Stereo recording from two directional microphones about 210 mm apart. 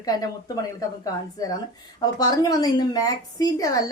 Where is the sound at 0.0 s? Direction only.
15° left (ahead or behind).